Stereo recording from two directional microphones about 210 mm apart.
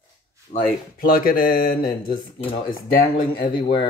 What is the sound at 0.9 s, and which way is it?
Speech, 45° left (ahead or behind).